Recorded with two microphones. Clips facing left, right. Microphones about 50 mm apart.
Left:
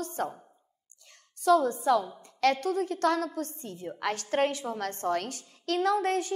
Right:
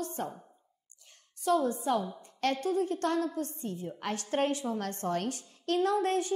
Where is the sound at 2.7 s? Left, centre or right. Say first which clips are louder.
Left 3 dB; left.